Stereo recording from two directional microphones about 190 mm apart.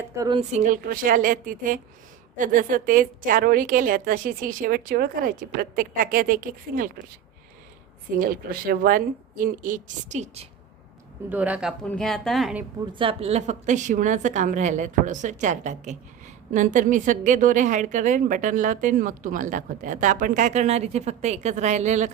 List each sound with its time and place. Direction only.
0.3 s a woman's voice: 40° right (ahead or behind)
8.2 s a woman's voice: 50° right (ahead or behind)
11.3 s speech: 5° right (ahead or behind)
11.9 s a woman's voice: 5° left (ahead or behind)
12.9 s a woman's voice: 30° right (ahead or behind)